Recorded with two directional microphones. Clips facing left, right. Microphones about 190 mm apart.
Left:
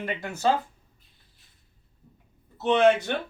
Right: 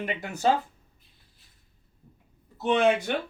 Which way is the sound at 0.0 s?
15° right (ahead or behind).